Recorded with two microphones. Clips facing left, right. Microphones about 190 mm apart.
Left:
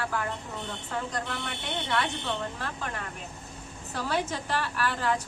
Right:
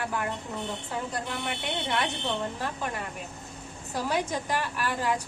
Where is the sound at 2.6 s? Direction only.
15° right (ahead or behind).